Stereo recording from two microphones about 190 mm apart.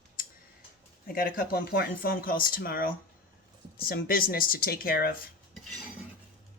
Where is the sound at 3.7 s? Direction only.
50° left (ahead or behind).